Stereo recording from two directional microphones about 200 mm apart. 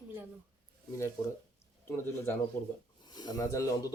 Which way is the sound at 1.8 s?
10° left (ahead or behind).